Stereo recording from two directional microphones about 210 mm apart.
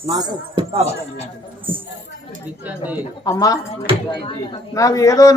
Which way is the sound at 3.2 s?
15° left (ahead or behind).